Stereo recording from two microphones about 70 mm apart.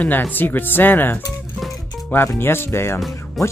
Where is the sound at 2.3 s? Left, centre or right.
Left.